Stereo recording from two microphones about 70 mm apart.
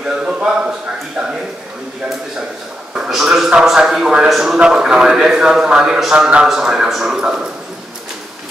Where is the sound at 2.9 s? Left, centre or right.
Centre.